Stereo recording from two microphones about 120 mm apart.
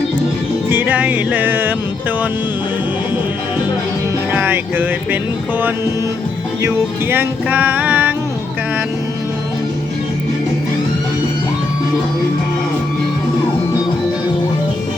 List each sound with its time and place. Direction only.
0.7 s music: 15° right (ahead or behind)
4.3 s music: 15° right (ahead or behind)